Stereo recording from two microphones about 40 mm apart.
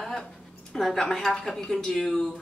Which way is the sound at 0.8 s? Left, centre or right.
Centre.